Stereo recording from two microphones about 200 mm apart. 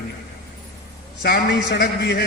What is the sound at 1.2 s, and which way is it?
A man's voice, 50° left (ahead or behind).